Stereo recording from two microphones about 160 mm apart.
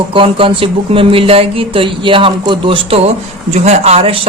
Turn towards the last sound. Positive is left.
turn(degrees=-40)  # may be behind; listen again after turning